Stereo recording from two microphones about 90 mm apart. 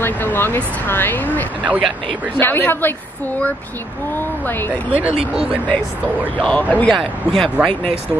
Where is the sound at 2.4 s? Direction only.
25° left (ahead or behind).